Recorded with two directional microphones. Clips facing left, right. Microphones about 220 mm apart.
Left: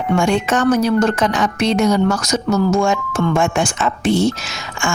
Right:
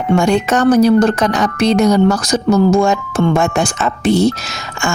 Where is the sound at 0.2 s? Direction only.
40° right (ahead or behind).